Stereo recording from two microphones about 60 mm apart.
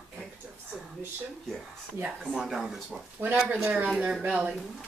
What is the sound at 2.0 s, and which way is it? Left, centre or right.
Speech, right.